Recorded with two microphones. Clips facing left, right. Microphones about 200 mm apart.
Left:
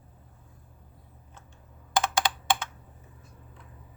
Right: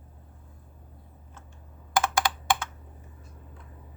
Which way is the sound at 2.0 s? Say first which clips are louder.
Right 1 dB; 20° left (ahead or behind).